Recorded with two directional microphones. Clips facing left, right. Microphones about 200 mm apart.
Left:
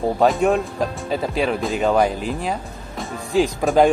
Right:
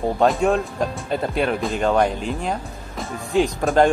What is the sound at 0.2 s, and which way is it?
Speech, centre (ahead or behind).